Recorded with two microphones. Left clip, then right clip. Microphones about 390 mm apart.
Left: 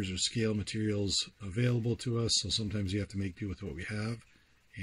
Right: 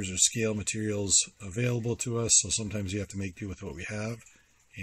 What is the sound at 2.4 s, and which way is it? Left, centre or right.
Speech, right.